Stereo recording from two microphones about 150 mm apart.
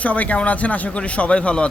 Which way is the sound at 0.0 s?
10° left (ahead or behind).